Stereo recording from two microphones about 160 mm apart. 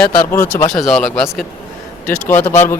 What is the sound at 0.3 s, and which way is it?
Speech, 15° left (ahead or behind).